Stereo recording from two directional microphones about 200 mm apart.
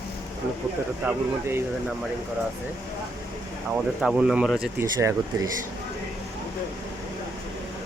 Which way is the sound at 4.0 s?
Centre (ahead or behind).